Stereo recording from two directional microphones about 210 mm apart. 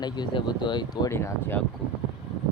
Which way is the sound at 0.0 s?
20° left (ahead or behind).